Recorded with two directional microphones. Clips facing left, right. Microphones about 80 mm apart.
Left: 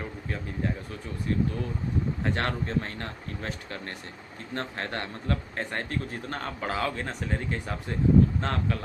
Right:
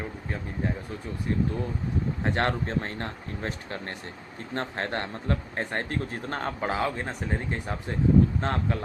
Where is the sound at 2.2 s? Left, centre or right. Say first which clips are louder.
Right 5 dB; right.